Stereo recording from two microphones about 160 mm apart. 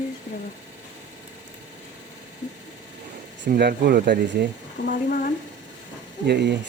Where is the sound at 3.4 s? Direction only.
80° right.